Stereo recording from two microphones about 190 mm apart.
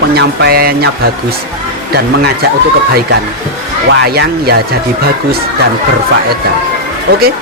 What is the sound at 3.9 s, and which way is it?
Speech, 60° right (ahead or behind).